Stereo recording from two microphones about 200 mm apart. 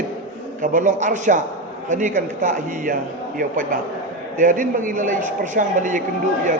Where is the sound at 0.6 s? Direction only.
40° right (ahead or behind).